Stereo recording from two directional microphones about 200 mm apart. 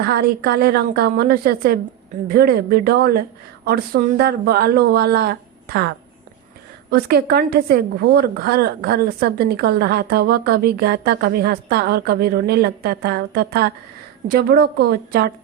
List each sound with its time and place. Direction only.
0.0 s a woman's voice: 50° right (ahead or behind)
6.9 s a woman's voice: 50° right (ahead or behind)